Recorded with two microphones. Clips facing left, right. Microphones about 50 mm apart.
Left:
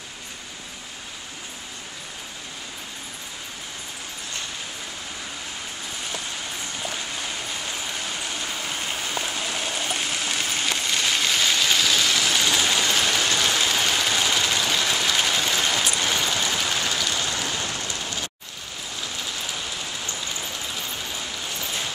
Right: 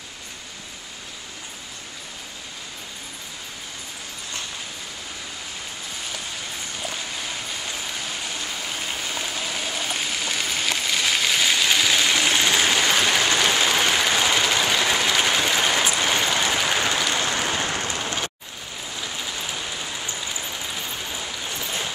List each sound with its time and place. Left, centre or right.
9.5 s a sound: centre; by 18.1 s right
18.9 s vehicle: centre
20.2 s rain: centre